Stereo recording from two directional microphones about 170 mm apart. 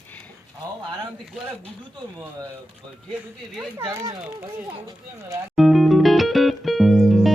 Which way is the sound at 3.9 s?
15° right (ahead or behind).